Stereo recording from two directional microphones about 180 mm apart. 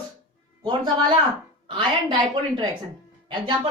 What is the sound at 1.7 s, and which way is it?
A woman's voice, 25° right (ahead or behind).